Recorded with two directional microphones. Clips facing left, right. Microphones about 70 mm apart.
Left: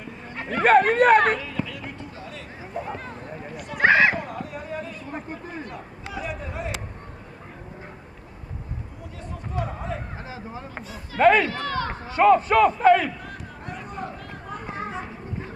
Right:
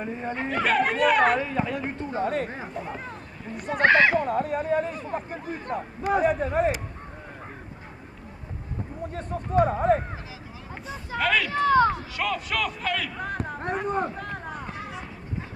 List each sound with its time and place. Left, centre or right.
0.6 s speech: left
1.3 s speech: right
2.7 s speech: centre
3.5 s speech: right
3.8 s speech: centre
4.2 s speech: right
9.1 s speech: right
11.1 s speech: left
11.5 s speech: right
11.9 s speech: left
13.2 s run: right
14.7 s a sound: left